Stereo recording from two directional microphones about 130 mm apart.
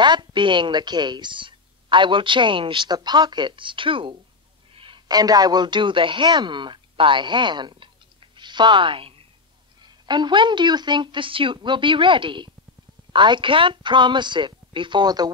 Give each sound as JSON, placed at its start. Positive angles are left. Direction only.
{"t": 0.0, "sound": "a man's voice", "side_deg": -35}